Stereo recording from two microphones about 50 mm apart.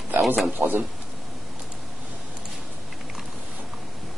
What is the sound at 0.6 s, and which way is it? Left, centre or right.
Speech, right.